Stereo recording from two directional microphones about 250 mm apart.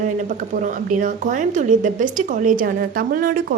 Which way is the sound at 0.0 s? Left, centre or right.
Right.